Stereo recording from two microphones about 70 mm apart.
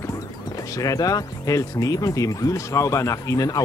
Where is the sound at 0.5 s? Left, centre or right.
Left.